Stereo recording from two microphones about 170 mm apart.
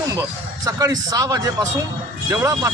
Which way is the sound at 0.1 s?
20° right (ahead or behind).